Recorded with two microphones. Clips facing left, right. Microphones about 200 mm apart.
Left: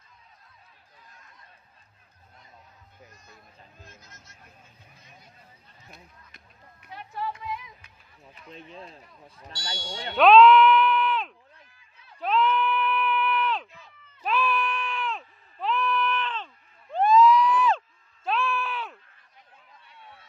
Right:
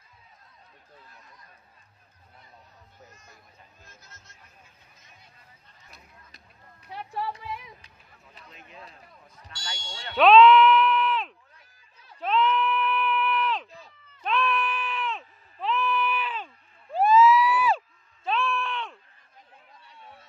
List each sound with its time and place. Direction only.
7.2 s music: 35° right (ahead or behind)
8.5 s speech: 30° left (ahead or behind)
10.1 s bleat: centre (ahead or behind)
12.2 s sheep: centre (ahead or behind)
14.2 s bleat: centre (ahead or behind)